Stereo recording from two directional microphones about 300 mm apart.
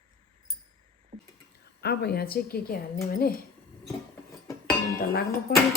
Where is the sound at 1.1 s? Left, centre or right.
Right.